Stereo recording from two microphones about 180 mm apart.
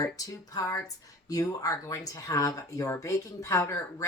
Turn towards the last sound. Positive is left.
turn(degrees=15)  # may be behind; listen again after turning